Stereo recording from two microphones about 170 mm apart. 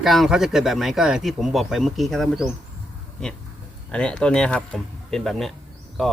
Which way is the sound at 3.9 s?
5° left (ahead or behind).